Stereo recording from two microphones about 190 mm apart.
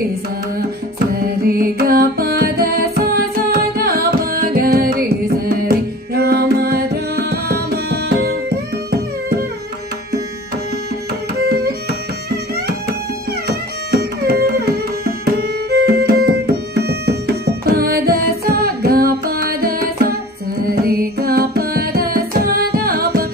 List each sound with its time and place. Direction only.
0.9 s music: 55° right (ahead or behind)
11.4 s tabla: 55° right (ahead or behind)
13.5 s tabla: 55° right (ahead or behind)
16.7 s music: 55° right (ahead or behind)